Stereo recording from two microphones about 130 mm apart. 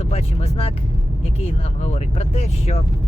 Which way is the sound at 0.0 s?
50° left (ahead or behind).